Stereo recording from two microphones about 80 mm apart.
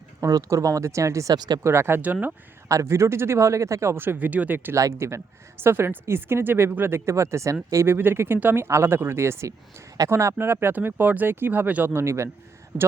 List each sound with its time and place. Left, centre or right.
0.2 s speech: right
1.4 s speech: right
1.6 s speech: right
4.7 s speech: right
7.9 s speech: right
12.0 s speech: right